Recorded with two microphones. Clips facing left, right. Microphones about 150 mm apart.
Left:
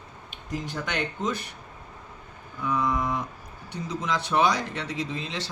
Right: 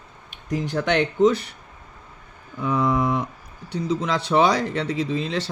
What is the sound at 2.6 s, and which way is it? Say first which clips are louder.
Speech: right 5 dB; 65° right (ahead or behind).